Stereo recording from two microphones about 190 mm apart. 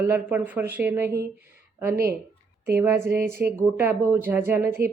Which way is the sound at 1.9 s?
50° right (ahead or behind).